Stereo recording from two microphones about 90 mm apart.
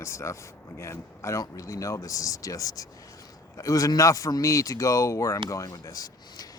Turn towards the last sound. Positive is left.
turn(degrees=40)  # may be behind; listen again after turning